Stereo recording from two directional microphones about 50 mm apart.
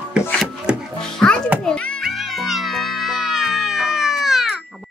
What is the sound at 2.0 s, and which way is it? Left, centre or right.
Music, centre.